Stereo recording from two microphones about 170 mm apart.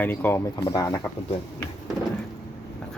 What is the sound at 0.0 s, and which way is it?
Speech, 10° left (ahead or behind).